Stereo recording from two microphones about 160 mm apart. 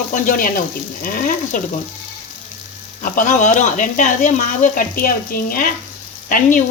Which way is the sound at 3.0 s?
55° left (ahead or behind).